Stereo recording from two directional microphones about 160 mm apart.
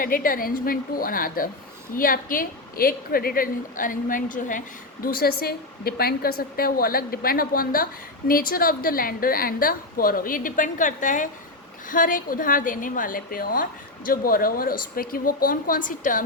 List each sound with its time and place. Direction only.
0.0 s a woman's voice: 60° left (ahead or behind)
5.0 s a woman's voice: 70° left (ahead or behind); by 16.2 s 55° left (ahead or behind)